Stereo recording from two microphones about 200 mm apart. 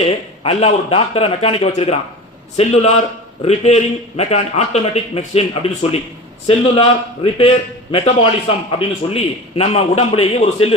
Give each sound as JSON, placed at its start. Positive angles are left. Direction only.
{"t": 0.0, "sound": "a man's voice", "side_deg": 30}